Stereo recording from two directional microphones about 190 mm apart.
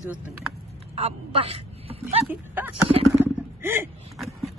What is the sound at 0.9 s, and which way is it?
Speech, 30° right (ahead or behind).